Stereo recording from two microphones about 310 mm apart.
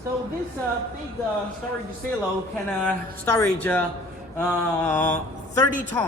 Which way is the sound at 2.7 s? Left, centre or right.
Centre.